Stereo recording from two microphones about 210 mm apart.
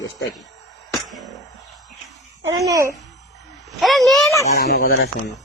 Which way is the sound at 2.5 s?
15° right (ahead or behind).